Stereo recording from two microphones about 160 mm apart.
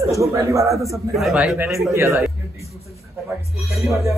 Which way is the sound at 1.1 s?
Centre (ahead or behind).